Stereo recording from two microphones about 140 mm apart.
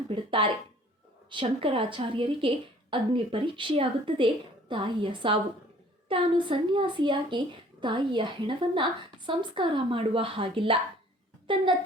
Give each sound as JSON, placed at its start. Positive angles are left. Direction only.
{"t": 0.1, "sound": "a woman's voice", "side_deg": -40}